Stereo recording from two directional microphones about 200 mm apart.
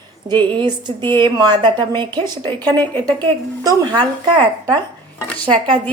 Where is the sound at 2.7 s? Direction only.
10° left (ahead or behind).